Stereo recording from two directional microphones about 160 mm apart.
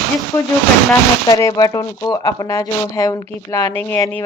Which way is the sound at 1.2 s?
20° left (ahead or behind).